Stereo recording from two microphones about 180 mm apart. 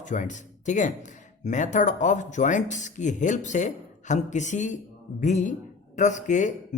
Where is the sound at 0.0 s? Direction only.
45° left (ahead or behind).